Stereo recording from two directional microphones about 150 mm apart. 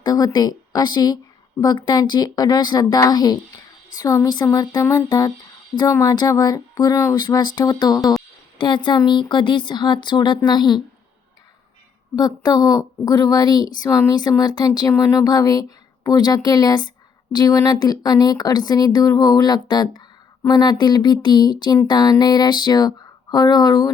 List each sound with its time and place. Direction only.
0.0 s speech: 25° left (ahead or behind)
12.1 s speech: 25° left (ahead or behind)